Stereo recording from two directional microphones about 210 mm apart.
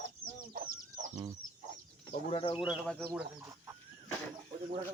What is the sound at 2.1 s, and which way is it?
Speech, 30° left (ahead or behind).